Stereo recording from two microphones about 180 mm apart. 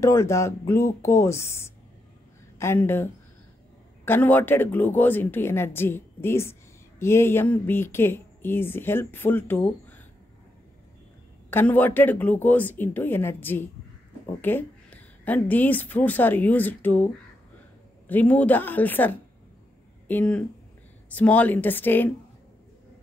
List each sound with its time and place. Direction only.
0.0 s a woman's voice: 15° left (ahead or behind)
11.5 s a woman's voice: 10° left (ahead or behind)